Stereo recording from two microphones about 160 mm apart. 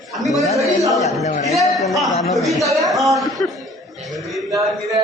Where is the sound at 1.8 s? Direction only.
Centre (ahead or behind).